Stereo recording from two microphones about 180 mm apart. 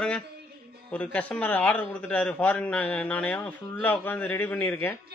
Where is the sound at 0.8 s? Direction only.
5° left (ahead or behind).